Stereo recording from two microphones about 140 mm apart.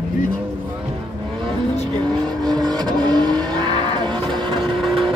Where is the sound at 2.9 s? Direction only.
30° right (ahead or behind).